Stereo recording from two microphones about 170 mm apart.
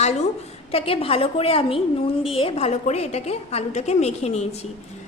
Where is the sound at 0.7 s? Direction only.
35° left (ahead or behind).